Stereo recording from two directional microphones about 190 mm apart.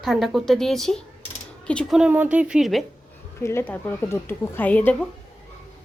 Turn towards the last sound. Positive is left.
turn(degrees=5)  # may be behind; listen again after turning